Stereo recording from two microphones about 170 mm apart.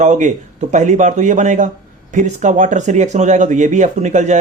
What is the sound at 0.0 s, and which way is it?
Speech, 45° right (ahead or behind).